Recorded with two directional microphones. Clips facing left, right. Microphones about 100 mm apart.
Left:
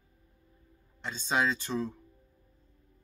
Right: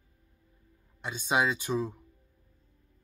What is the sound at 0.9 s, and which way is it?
Speech, 15° right (ahead or behind).